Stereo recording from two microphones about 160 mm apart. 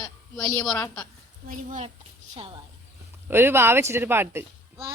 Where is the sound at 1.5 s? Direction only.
50° right (ahead or behind).